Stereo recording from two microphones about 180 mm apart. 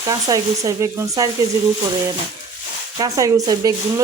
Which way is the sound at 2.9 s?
20° right (ahead or behind).